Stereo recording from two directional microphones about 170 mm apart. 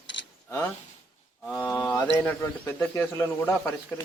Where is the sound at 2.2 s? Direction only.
10° left (ahead or behind).